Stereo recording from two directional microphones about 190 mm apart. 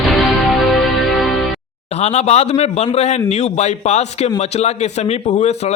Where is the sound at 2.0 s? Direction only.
35° left (ahead or behind).